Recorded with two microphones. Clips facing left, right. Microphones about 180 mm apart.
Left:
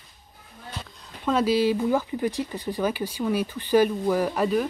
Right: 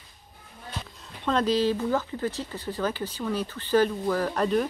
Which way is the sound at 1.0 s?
5° left (ahead or behind).